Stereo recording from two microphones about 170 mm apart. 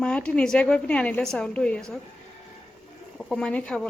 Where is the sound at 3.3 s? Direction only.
5° left (ahead or behind).